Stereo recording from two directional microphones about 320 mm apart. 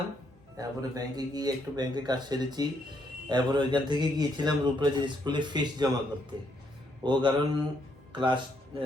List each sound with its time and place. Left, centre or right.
0.5 s a man's voice: centre
7.0 s a man's voice: centre